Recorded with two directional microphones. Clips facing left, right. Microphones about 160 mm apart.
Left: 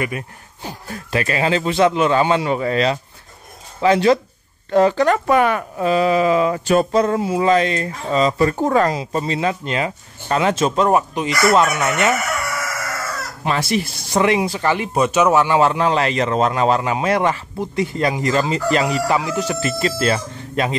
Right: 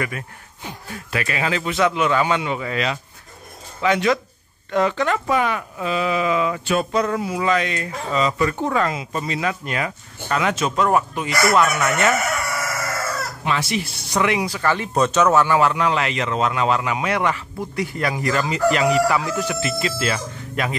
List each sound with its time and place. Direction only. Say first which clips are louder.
0.6 s speech: left 3 dB; 35° left (ahead or behind)
5.2 s speech: left 5 dB; 55° left (ahead or behind); by 12.1 s 20° left (ahead or behind)
13.4 s speech: left 5 dB; 40° left (ahead or behind)
14.1 s speech: left 4 dB; 30° left (ahead or behind)
19.4 s speech: left 3 dB; 35° left (ahead or behind)